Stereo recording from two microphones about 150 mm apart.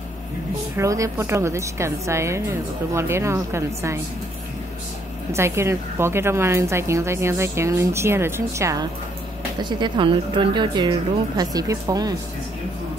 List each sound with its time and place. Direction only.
0.7 s a woman's voice: 20° right (ahead or behind)
5.3 s a woman's voice: 15° right (ahead or behind)
9.6 s a woman's voice: 30° right (ahead or behind)